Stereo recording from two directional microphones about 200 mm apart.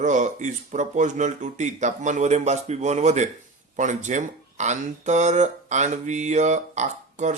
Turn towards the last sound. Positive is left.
turn(degrees=-35)  # may be behind; listen again after turning